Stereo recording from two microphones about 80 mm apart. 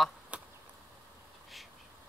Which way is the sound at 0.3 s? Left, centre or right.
Centre.